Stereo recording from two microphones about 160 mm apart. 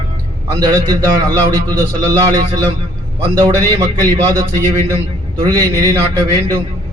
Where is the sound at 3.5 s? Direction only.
20° right (ahead or behind).